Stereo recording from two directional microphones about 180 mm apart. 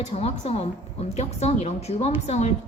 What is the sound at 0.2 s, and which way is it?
A woman's voice, 35° left (ahead or behind).